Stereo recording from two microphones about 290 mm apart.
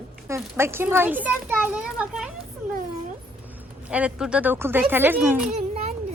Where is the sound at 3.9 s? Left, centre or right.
Centre.